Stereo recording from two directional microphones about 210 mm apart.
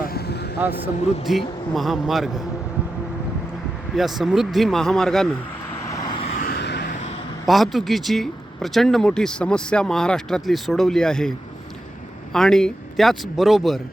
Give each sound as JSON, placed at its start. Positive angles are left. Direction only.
{"t": 0.0, "sound": "vehicle", "side_deg": 45}
{"t": 1.3, "sound": "speech", "side_deg": 0}
{"t": 3.9, "sound": "speech", "side_deg": 0}
{"t": 5.9, "sound": "vehicle", "side_deg": 20}
{"t": 6.3, "sound": "vehicle", "side_deg": 45}
{"t": 7.4, "sound": "speech", "side_deg": 0}